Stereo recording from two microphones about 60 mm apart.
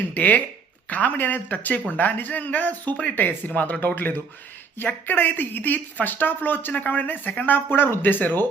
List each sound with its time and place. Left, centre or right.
0.1 s speech: left